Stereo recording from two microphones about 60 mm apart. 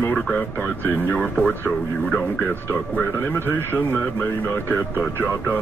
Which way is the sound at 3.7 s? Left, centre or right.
Left.